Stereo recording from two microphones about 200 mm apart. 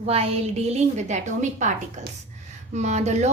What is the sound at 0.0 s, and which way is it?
A woman's voice, 30° right (ahead or behind).